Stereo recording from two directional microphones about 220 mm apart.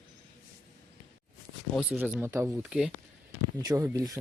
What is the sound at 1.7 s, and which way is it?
Speech, 5° right (ahead or behind).